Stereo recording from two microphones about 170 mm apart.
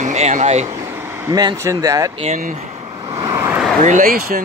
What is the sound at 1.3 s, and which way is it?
Speech, 20° right (ahead or behind).